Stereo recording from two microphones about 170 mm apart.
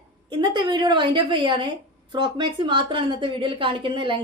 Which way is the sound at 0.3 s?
30° right (ahead or behind).